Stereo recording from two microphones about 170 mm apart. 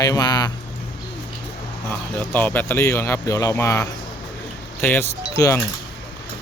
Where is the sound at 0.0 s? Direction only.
20° left (ahead or behind).